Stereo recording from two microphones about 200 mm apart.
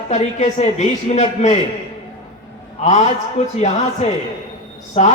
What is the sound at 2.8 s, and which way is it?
Speech, 35° left (ahead or behind).